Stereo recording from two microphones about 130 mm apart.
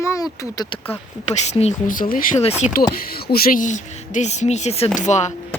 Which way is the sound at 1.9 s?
90° left.